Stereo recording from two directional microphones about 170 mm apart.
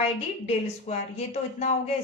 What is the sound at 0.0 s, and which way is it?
Speech, 35° left (ahead or behind).